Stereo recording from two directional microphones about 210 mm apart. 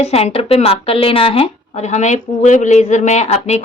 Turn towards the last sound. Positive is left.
turn(degrees=30)  # may be behind; listen again after turning